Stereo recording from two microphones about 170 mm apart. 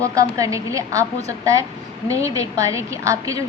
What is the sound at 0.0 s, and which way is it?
A woman's voice, 20° right (ahead or behind).